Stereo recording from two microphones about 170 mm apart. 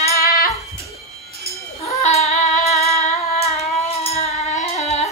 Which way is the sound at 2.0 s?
40° left (ahead or behind).